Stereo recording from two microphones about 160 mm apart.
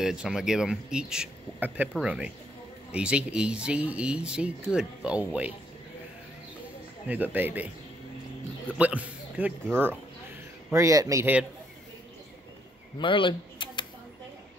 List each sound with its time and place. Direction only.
0.0 s speech: 5° right (ahead or behind)
7.1 s speech: 10° right (ahead or behind)
8.7 s speech: 10° right (ahead or behind)
13.0 s a sound: 30° left (ahead or behind)